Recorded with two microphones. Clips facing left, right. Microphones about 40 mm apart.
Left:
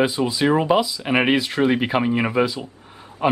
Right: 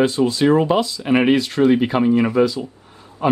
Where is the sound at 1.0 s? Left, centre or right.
Centre.